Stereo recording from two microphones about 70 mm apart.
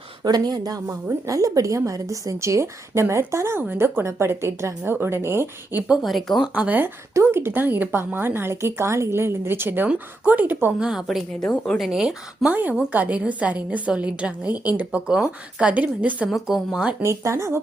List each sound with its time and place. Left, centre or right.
0.3 s a woman's voice: right
3.6 s speech: right
6.0 s speech: centre
6.5 s a woman's voice: right
7.1 s a woman's voice: right
10.8 s speech: centre
11.4 s a woman's voice: centre
11.8 s speech: centre
12.5 s a woman's voice: right
15.0 s speech: centre
15.7 s a woman's voice: right
16.3 s speech: centre
17.0 s a woman's voice: right